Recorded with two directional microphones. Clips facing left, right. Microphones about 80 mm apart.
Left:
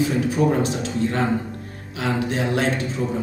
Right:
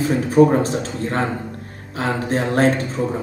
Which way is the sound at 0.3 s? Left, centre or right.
Right.